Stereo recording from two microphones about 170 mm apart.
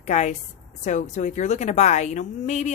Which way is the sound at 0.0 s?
45° left (ahead or behind).